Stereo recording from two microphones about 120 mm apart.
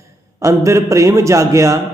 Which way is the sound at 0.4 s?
25° right (ahead or behind).